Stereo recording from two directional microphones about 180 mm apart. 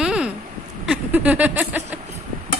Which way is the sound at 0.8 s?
10° right (ahead or behind).